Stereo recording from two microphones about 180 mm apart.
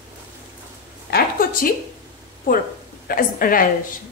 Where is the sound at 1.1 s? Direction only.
50° left (ahead or behind).